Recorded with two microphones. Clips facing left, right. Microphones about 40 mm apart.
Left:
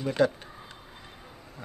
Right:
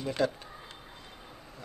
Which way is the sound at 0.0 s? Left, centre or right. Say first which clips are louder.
Left 5 dB; centre.